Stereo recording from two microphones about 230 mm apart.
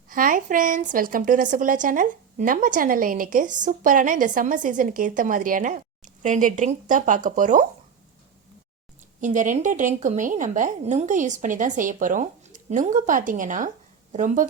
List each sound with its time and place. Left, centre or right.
0.1 s a woman's voice: right
9.2 s a woman's voice: right